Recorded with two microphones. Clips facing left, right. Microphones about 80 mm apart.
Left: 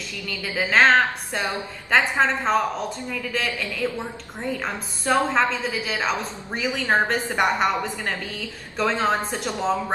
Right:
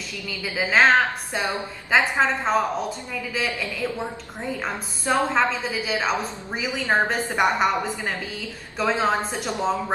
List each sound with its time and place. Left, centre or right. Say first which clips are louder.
0.6 s a woman's voice: left 1 dB; centre
9.5 s speech: even; centre